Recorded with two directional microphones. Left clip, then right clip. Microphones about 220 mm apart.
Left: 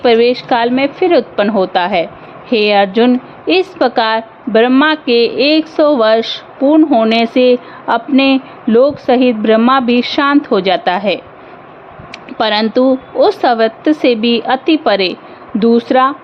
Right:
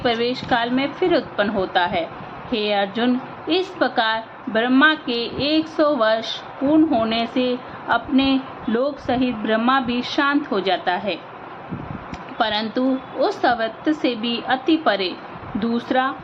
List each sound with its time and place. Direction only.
0.0 s a woman's voice: 35° left (ahead or behind)
12.4 s a woman's voice: 45° left (ahead or behind)